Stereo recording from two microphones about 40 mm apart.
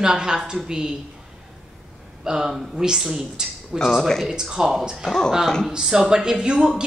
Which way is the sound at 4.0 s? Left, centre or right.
Centre.